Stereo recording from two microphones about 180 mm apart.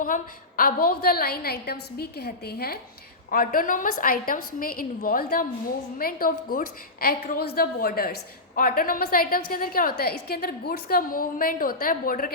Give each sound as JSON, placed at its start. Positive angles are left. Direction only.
{"t": 0.0, "sound": "a woman's voice", "side_deg": 50}